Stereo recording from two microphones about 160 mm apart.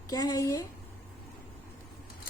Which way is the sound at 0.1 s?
25° left (ahead or behind).